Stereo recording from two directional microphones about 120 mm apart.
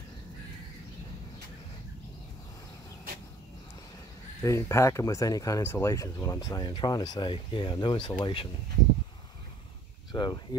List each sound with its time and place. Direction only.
4.4 s speech: 25° left (ahead or behind); by 8.5 s 45° left (ahead or behind)
10.1 s speech: 35° left (ahead or behind)